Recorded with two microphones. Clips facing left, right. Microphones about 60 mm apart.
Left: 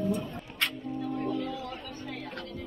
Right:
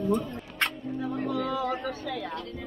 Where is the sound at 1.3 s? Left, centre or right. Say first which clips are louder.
Right 6 dB; right.